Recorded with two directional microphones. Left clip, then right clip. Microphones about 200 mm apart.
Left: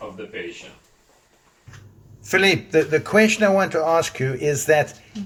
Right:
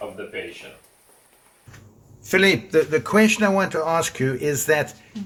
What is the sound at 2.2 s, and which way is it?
Speech, 10° right (ahead or behind).